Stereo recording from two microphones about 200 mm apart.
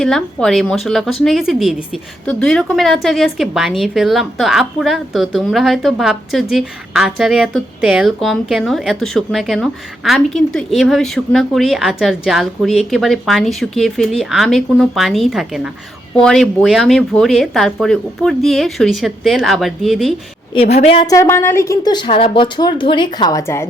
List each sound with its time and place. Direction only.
0.0 s a woman's voice: centre (ahead or behind)
20.5 s a woman's voice: 30° left (ahead or behind); by 23.6 s 15° left (ahead or behind)